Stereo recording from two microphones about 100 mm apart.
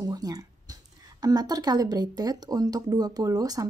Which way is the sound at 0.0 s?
40° right (ahead or behind).